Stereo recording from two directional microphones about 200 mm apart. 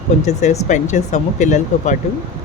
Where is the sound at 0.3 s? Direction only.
35° left (ahead or behind).